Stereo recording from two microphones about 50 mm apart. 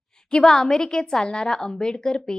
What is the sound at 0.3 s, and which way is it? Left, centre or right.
A woman's voice, centre.